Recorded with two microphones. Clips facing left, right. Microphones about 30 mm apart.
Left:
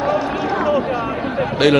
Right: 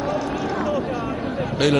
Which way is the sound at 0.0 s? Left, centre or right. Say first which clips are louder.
Left 5 dB; left.